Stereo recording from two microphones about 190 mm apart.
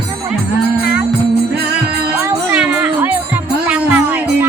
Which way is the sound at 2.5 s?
5° right (ahead or behind).